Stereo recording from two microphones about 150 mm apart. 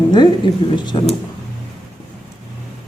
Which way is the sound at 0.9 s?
30° left (ahead or behind).